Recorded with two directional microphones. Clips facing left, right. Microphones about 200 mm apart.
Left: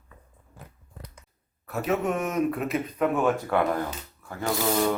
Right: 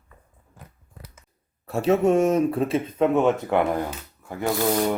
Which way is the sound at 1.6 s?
30° right (ahead or behind).